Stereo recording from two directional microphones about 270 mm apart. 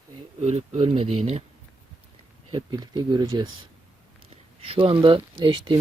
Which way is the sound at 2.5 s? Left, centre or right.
Centre.